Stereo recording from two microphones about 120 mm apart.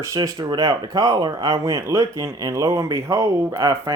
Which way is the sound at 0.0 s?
30° right (ahead or behind).